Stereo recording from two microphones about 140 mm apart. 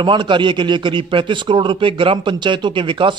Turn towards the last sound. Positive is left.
turn(degrees=-35)  # may be behind; listen again after turning